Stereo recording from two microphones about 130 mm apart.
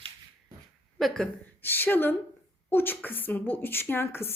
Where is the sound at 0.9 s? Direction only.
5° left (ahead or behind).